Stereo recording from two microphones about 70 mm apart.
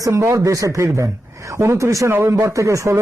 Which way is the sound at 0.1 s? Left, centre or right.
Right.